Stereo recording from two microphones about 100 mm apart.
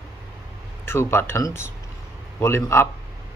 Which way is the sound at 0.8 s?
25° left (ahead or behind).